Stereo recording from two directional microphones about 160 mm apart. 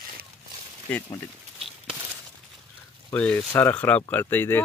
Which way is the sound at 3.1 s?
10° left (ahead or behind).